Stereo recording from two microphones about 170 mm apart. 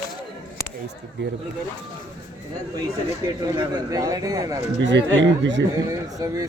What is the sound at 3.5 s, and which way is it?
Speech, 20° right (ahead or behind).